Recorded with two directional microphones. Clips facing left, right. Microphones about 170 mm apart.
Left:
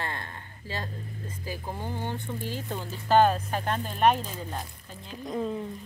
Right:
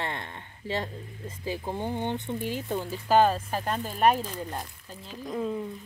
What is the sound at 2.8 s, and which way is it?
Speech, 5° right (ahead or behind).